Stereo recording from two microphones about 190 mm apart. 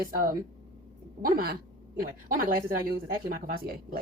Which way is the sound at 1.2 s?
50° right (ahead or behind).